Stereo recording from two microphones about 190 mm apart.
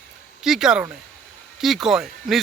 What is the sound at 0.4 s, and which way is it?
Speech, 5° right (ahead or behind).